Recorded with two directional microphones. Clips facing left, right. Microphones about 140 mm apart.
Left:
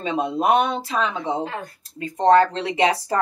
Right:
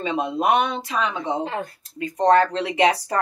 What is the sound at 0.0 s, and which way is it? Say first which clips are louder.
Speech: left 1 dB; 30° left (ahead or behind).